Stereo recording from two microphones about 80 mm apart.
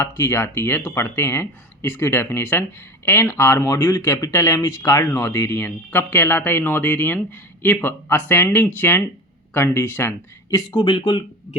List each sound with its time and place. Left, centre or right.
0.0 s speech: left
10.7 s speech: left